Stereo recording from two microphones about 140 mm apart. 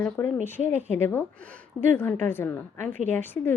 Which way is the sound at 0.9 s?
15° left (ahead or behind).